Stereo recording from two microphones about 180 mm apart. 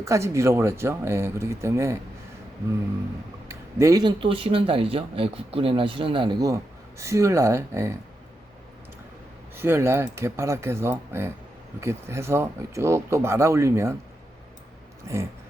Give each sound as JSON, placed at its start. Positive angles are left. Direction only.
{"t": 0.0, "sound": "speech", "side_deg": -15}
{"t": 3.5, "sound": "speech", "side_deg": -15}
{"t": 9.6, "sound": "speech", "side_deg": -15}
{"t": 15.0, "sound": "speech", "side_deg": -15}